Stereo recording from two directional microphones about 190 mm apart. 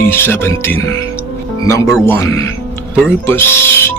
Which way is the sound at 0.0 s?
10° left (ahead or behind).